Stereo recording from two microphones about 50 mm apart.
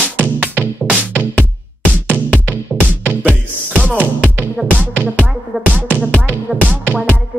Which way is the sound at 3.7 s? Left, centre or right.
Right.